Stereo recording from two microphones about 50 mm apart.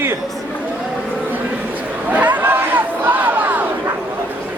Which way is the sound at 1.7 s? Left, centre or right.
Right.